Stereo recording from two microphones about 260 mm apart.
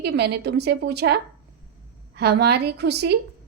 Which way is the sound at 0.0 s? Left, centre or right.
Right.